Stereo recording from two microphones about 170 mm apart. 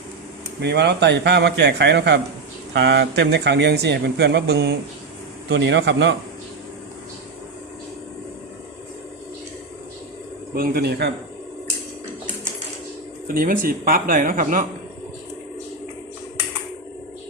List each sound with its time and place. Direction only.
0.6 s speech: 75° right (ahead or behind)
5.5 s speech: 90° right
10.5 s speech: 60° right (ahead or behind)
13.2 s speech: 60° right (ahead or behind)